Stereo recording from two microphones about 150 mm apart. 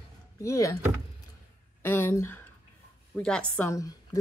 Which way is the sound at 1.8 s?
15° left (ahead or behind).